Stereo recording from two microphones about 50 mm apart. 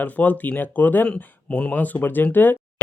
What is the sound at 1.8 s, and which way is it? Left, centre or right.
Speech, left.